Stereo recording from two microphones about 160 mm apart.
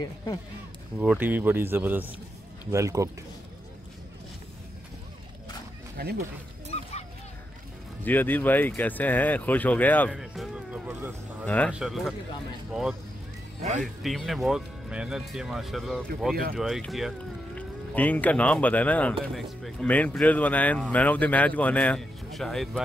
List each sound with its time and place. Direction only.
0.0 s speech: 25° left (ahead or behind)
0.9 s speech: 10° right (ahead or behind)
5.9 s speech: 75° right (ahead or behind)
6.7 s bow-wow: 40° left (ahead or behind)
8.0 s speech: 10° left (ahead or behind)
10.1 s speech: centre (ahead or behind)
11.4 s speech: 10° left (ahead or behind)
11.7 s speech: centre (ahead or behind)
13.6 s speech: 45° right (ahead or behind)
14.0 s speech: centre (ahead or behind)
17.6 s speech: 10° left (ahead or behind)